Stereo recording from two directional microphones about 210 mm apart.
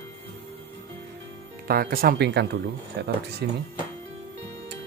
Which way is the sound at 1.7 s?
45° right (ahead or behind).